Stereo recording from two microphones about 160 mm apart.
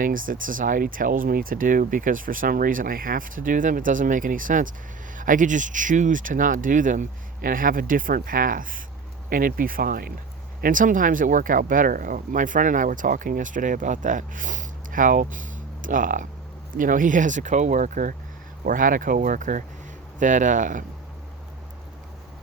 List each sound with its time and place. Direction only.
0.0 s speech: 60° right (ahead or behind)
10.6 s speech: 55° right (ahead or behind)